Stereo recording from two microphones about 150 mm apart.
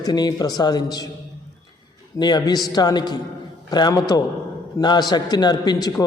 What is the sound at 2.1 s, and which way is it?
A man's voice, 30° left (ahead or behind).